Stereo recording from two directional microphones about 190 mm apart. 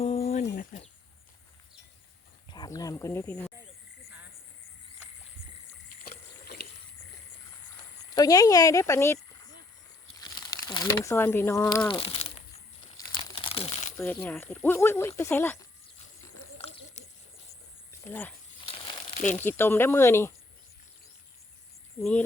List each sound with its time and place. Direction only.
0.0 s a sound: 35° left (ahead or behind)
0.4 s a sound: 45° left (ahead or behind)
2.5 s a sound: 20° left (ahead or behind)
6.0 s rowboat: 50° left (ahead or behind)
8.1 s speech: 20° left (ahead or behind)
10.2 s crumpling: 20° left (ahead or behind)
11.9 s speech: 30° left (ahead or behind)
13.3 s crumpling: 30° left (ahead or behind)
13.9 s speech: 10° left (ahead or behind)
16.6 s a sound: 35° left (ahead or behind)
18.0 s speech: 10° left (ahead or behind)
18.6 s crumpling: 30° left (ahead or behind)
19.4 s speech: 10° left (ahead or behind)